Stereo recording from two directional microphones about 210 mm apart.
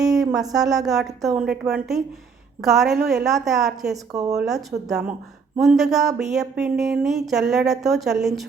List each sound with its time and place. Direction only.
0.3 s speech: 15° right (ahead or behind)
0.7 s speech: centre (ahead or behind)
4.1 s speech: 15° right (ahead or behind)
4.4 s speech: centre (ahead or behind)